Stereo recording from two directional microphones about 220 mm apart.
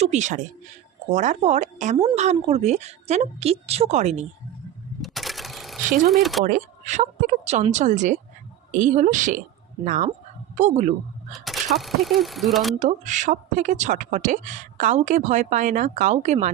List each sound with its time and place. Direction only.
0.0 s a woman's voice: 30° right (ahead or behind)
5.0 s sewing machine: centre (ahead or behind)
6.1 s speech: centre (ahead or behind)
6.4 s a woman's voice: 35° right (ahead or behind)
11.3 s speech: centre (ahead or behind)
12.8 s a woman's voice: 35° right (ahead or behind)